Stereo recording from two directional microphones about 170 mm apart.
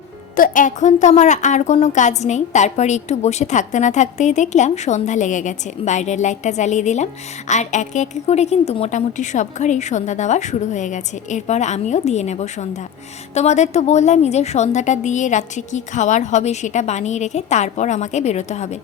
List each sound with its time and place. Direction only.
0.3 s a woman's voice: 50° left (ahead or behind)